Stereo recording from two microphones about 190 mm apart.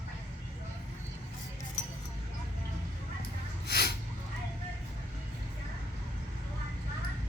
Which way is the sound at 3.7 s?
55° left (ahead or behind).